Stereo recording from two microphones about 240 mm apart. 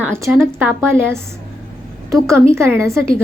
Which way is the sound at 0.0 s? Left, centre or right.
Centre.